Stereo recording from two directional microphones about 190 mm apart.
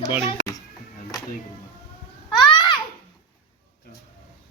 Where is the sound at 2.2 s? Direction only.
25° left (ahead or behind).